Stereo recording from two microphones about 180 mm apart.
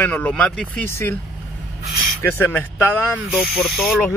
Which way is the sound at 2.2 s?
10° left (ahead or behind).